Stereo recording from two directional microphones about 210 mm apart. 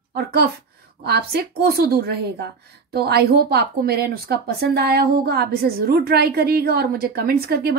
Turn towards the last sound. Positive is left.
turn(degrees=-50)  # may be behind; listen again after turning